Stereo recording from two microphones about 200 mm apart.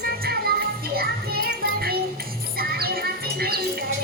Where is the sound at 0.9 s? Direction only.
50° right (ahead or behind).